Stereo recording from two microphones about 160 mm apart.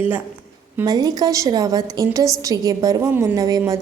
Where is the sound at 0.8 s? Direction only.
25° right (ahead or behind).